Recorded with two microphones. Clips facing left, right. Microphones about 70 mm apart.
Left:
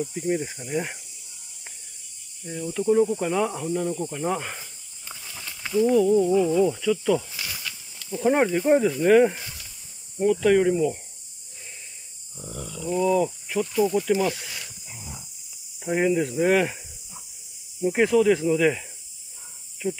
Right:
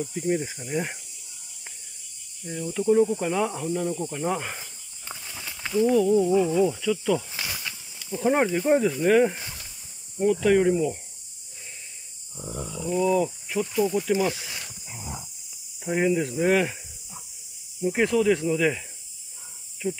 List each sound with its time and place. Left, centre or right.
0.0 s speech: centre
2.4 s speech: centre
5.1 s a sound: centre
6.4 s speech: centre
7.3 s snake: right
8.0 s speech: centre
12.4 s a sound: centre
12.8 s speech: centre
14.9 s a sound: right
15.8 s speech: centre